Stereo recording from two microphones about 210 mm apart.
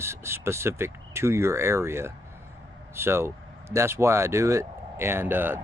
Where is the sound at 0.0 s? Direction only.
10° right (ahead or behind).